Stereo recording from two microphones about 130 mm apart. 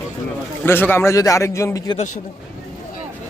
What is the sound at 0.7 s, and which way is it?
A man's voice, 15° left (ahead or behind).